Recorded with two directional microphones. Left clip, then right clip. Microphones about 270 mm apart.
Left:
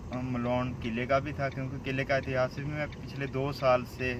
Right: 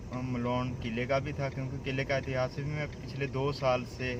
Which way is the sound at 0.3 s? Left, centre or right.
Centre.